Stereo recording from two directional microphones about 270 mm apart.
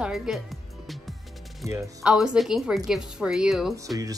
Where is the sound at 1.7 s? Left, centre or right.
Centre.